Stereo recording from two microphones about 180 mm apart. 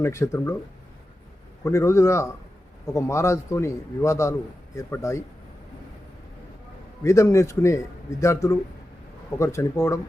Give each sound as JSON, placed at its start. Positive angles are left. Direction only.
{"t": 0.0, "sound": "a man's voice", "side_deg": 15}
{"t": 1.6, "sound": "a man's voice", "side_deg": 15}
{"t": 7.0, "sound": "a man's voice", "side_deg": 15}